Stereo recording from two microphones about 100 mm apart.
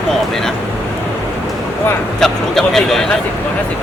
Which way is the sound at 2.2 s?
5° left (ahead or behind).